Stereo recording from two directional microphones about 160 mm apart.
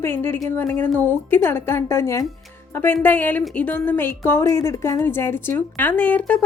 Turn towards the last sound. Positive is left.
turn(degrees=10)  # may be behind; listen again after turning